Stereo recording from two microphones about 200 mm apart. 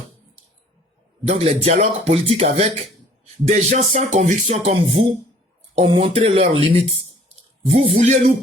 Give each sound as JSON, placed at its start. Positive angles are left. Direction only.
{"t": 1.3, "sound": "speech", "side_deg": -30}
{"t": 7.8, "sound": "speech", "side_deg": -35}